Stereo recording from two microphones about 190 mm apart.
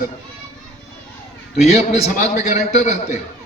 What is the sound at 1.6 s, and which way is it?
A man's voice, 35° left (ahead or behind).